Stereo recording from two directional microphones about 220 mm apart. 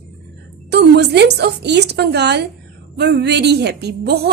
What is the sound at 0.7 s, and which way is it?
A woman's voice, 50° right (ahead or behind).